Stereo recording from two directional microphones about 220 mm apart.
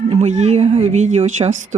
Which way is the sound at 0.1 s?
30° right (ahead or behind).